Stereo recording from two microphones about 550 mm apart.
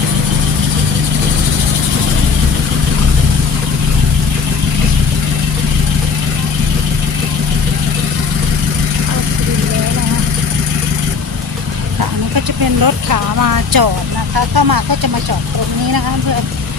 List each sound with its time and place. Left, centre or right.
12.8 s speech: right